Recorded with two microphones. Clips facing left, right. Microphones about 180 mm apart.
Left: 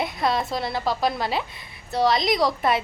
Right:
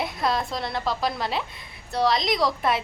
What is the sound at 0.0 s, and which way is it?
A woman's voice, centre (ahead or behind).